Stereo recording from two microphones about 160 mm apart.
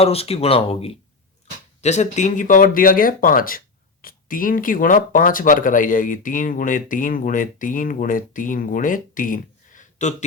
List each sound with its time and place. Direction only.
0.0 s speech: 40° left (ahead or behind)